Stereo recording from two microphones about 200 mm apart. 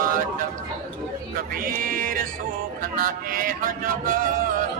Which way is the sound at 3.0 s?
45° right (ahead or behind).